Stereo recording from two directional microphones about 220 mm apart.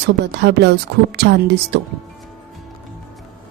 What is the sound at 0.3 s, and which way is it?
A woman's voice, 50° right (ahead or behind).